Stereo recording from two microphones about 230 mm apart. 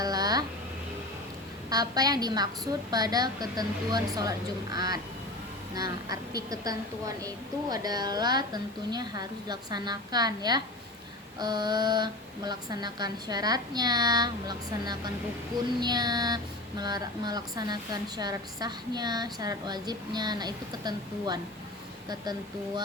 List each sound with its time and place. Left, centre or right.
0.0 s a sound: centre
1.7 s speech: centre
7.2 s speech: centre